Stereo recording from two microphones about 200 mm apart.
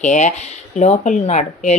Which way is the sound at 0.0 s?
35° left (ahead or behind).